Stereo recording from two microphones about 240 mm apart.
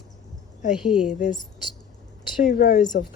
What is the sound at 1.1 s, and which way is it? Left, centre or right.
Speech, left.